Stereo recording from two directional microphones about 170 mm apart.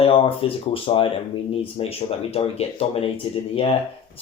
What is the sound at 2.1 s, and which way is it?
Speech, 35° left (ahead or behind).